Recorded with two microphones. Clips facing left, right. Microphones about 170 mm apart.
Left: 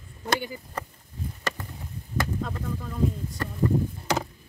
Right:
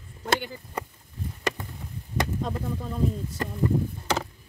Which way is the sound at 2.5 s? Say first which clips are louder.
Right 2 dB; 25° right (ahead or behind).